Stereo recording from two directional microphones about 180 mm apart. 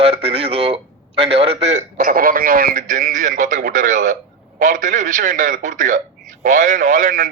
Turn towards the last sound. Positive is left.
turn(degrees=-50)  # may be behind; listen again after turning